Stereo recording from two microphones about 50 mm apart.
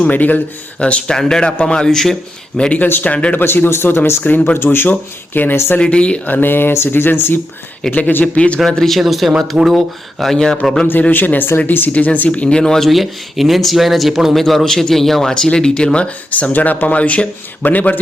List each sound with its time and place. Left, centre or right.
0.1 s speech: left
0.8 s speech: left
3.3 s speech: left
4.3 s speech: left
4.5 s speech: left
5.8 s speech: left
6.2 s speech: left
7.9 s speech: left
8.5 s speech: centre
9.0 s speech: centre
10.3 s speech: centre
11.1 s speech: left
11.9 s speech: left; by 12.9 s centre
12.9 s speech: centre; by 18.0 s left